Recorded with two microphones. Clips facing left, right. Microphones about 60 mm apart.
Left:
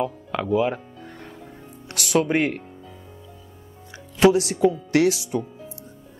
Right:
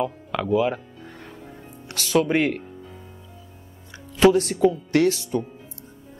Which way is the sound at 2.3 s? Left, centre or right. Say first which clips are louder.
Right 1 dB; left.